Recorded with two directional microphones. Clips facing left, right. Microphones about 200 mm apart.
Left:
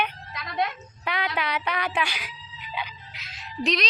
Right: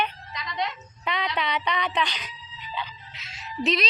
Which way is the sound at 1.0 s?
5° left (ahead or behind).